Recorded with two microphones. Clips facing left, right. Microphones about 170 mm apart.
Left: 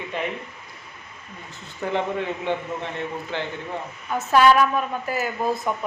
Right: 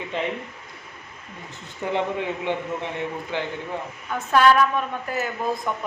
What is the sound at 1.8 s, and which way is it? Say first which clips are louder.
A man's voice: even; 15° right (ahead or behind).